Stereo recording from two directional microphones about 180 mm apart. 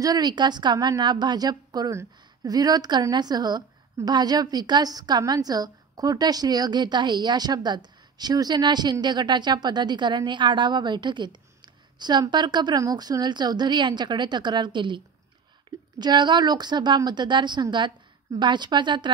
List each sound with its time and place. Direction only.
0.0 s a woman's voice: 20° right (ahead or behind)
16.0 s a woman's voice: 25° right (ahead or behind)